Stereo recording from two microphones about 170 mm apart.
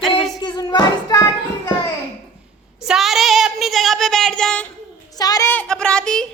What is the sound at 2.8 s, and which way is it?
Child singing, centre (ahead or behind).